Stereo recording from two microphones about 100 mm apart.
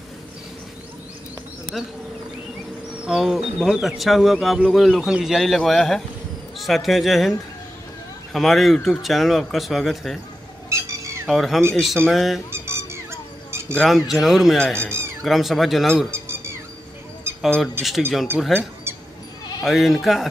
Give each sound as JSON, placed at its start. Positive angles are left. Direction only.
{"t": 3.1, "sound": "a man's voice", "side_deg": -5}
{"t": 11.2, "sound": "a man's voice", "side_deg": 0}
{"t": 12.4, "sound": "squeak", "side_deg": -25}
{"t": 13.7, "sound": "a man's voice", "side_deg": 0}
{"t": 14.6, "sound": "speech", "side_deg": 10}
{"t": 14.9, "sound": "a sound", "side_deg": -25}
{"t": 15.2, "sound": "a man's voice", "side_deg": 0}
{"t": 16.1, "sound": "a sound", "side_deg": -25}
{"t": 17.6, "sound": "a man's voice", "side_deg": 0}
{"t": 18.9, "sound": "sheep", "side_deg": -25}
{"t": 19.6, "sound": "a man's voice", "side_deg": 0}